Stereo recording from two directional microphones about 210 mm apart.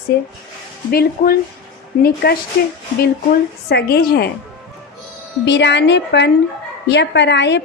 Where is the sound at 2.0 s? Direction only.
45° left (ahead or behind).